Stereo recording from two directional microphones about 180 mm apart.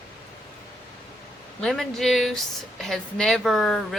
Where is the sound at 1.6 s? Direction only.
5° left (ahead or behind).